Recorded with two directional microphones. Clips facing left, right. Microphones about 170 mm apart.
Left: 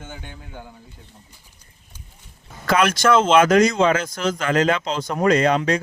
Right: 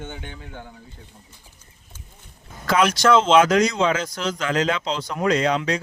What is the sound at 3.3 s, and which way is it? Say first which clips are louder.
Speech: left 2 dB; 50° left (ahead or behind).